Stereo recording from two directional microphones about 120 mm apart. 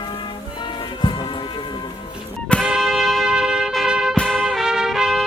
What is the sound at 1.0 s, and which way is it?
Music, 40° left (ahead or behind).